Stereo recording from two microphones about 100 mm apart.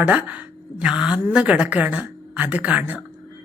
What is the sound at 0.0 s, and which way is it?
A woman's voice, 15° right (ahead or behind).